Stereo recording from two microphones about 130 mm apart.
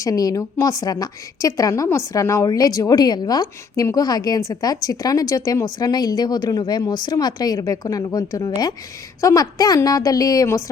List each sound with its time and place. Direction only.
0.0 s a woman's voice: 30° left (ahead or behind)